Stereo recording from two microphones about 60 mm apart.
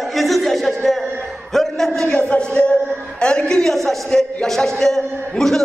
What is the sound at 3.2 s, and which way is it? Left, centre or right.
A man's voice, centre.